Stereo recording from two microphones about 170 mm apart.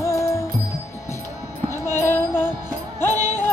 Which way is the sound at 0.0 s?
20° left (ahead or behind).